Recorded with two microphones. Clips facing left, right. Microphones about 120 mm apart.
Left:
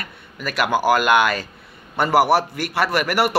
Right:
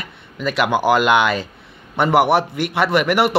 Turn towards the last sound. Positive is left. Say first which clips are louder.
# right 3 dB
turn(degrees=-20)  # may be behind; listen again after turning